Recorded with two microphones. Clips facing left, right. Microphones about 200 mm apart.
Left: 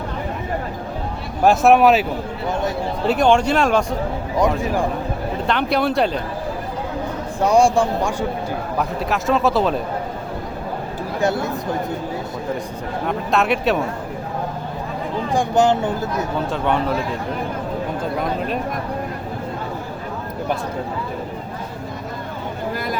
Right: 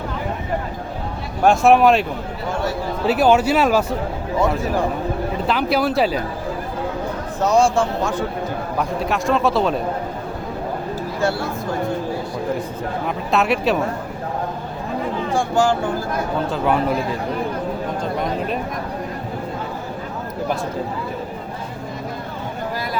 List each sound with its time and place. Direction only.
1.5 s speech: centre (ahead or behind)
3.1 s speech: 5° right (ahead or behind)
5.5 s speech: 5° right (ahead or behind)
7.4 s a man's voice: 15° left (ahead or behind)
8.8 s speech: centre (ahead or behind)
11.2 s speech: 20° left (ahead or behind)
13.1 s speech: centre (ahead or behind)
15.3 s speech: 20° left (ahead or behind)
16.5 s speech: 5° right (ahead or behind)